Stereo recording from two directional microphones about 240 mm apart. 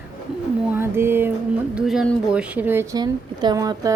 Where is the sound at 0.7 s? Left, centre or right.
Centre.